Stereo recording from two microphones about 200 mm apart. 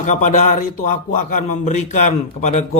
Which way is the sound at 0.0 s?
40° left (ahead or behind).